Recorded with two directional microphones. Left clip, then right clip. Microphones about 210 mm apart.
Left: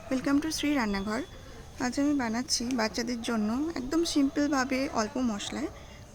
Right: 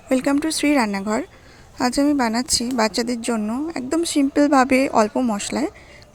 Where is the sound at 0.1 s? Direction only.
30° right (ahead or behind).